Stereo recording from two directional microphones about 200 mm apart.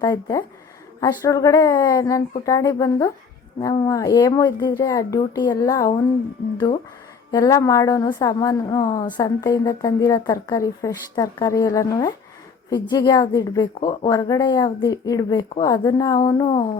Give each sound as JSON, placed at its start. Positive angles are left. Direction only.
{"t": 0.0, "sound": "speech", "side_deg": 20}
{"t": 7.3, "sound": "speech", "side_deg": 20}